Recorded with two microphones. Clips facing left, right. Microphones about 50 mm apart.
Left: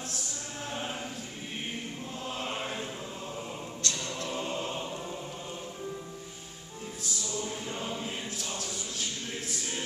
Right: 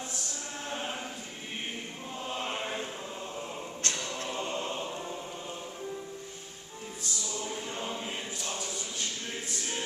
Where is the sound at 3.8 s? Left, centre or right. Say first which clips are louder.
Even; right.